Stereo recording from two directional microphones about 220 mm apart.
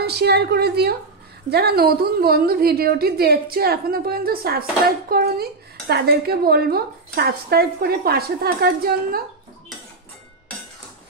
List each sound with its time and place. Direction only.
0.0 s a woman's voice: 50° right (ahead or behind)